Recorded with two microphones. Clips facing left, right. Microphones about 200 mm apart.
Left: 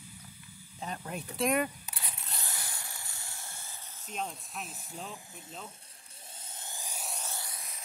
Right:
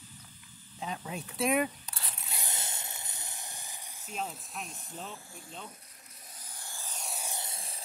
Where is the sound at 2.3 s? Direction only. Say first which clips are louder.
Right 3 dB; 20° right (ahead or behind).